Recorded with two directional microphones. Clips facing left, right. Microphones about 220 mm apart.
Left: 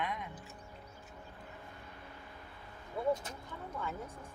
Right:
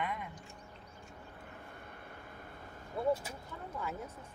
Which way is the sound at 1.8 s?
55° right (ahead or behind).